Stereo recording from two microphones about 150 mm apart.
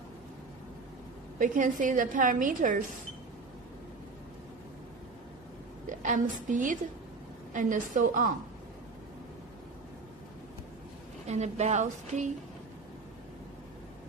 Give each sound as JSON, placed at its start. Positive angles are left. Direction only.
{"t": 1.4, "sound": "a woman's voice", "side_deg": -60}
{"t": 5.9, "sound": "a woman's voice", "side_deg": -60}
{"t": 11.2, "sound": "speech", "side_deg": -50}